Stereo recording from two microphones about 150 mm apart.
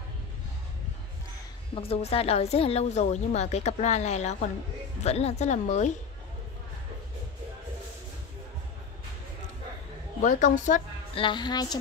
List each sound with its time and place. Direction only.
1.8 s a woman's voice: 40° left (ahead or behind)
10.2 s a woman's voice: 55° left (ahead or behind)
11.1 s music: 30° left (ahead or behind)